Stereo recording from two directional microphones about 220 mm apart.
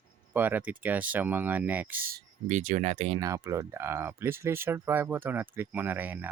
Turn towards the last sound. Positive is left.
turn(degrees=-10)  # may be behind; listen again after turning